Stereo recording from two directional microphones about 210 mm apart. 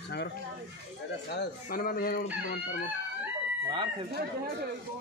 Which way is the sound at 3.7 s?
25° right (ahead or behind).